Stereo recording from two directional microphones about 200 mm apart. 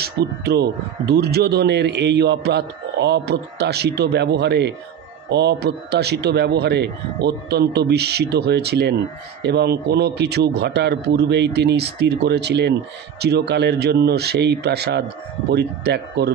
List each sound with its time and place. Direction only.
0.0 s speech: 55° right (ahead or behind)